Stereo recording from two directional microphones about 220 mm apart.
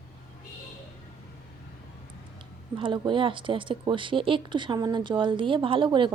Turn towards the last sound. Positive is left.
turn(degrees=-20)  # may be behind; listen again after turning